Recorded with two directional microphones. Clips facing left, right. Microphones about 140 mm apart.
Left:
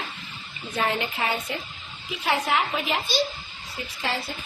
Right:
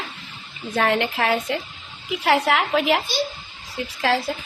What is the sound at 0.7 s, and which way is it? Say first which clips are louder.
A woman's voice: right 6 dB; 80° right.